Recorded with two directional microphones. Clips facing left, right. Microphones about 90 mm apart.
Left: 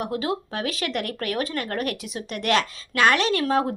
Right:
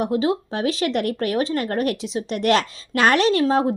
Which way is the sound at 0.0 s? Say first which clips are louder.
Right 6 dB; 25° right (ahead or behind).